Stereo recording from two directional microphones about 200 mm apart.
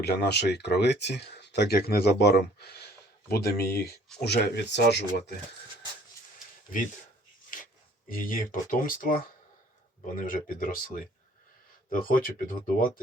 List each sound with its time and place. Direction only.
0.0 s speech: 55° left (ahead or behind)
7.5 s speech: 45° left (ahead or behind)
10.2 s speech: 45° left (ahead or behind)